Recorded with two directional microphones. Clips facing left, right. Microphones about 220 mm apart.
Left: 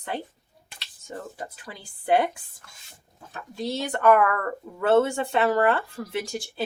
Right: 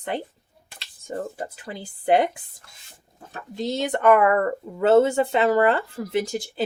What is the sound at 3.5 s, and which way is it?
Speech, 20° right (ahead or behind).